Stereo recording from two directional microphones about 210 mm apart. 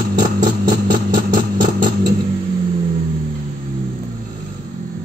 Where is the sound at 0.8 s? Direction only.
40° right (ahead or behind).